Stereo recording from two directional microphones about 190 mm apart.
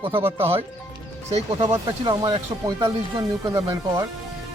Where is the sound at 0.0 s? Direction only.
30° right (ahead or behind).